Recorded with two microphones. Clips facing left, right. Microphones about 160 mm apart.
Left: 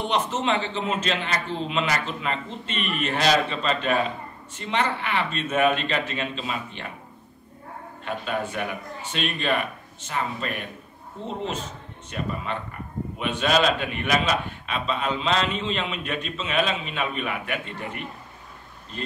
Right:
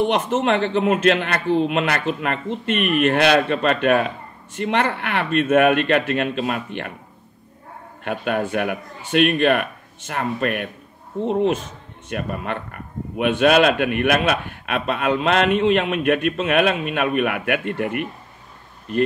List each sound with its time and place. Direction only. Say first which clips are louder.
0.1 s speech: right 5 dB; 55° right (ahead or behind)
8.0 s speech: right 6 dB; 60° right (ahead or behind)